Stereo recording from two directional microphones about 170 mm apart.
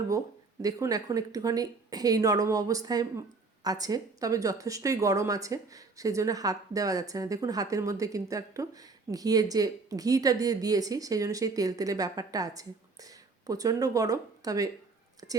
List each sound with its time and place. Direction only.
0.6 s a woman's voice: 20° right (ahead or behind)